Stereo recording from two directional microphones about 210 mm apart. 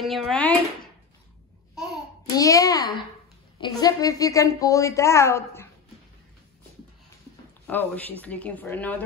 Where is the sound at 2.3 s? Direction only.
15° left (ahead or behind).